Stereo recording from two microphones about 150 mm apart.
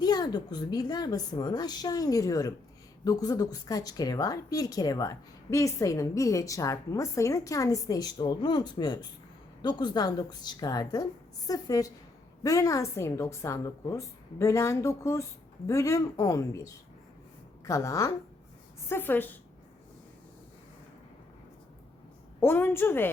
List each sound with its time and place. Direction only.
0.0 s a woman's voice: 25° left (ahead or behind)
22.4 s a woman's voice: 15° left (ahead or behind)